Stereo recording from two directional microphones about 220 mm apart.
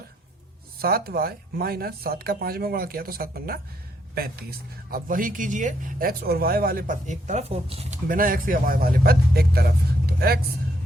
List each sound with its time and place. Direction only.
0.8 s speech: 45° right (ahead or behind); by 7.9 s 25° right (ahead or behind)
8.0 s speech: 40° right (ahead or behind)